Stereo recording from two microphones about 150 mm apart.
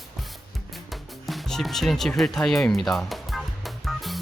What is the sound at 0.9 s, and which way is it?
Music, centre (ahead or behind).